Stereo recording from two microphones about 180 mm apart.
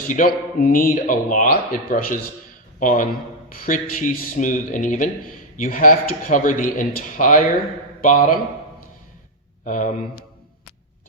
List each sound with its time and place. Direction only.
0.1 s speech: 50° left (ahead or behind)
9.6 s speech: 45° left (ahead or behind)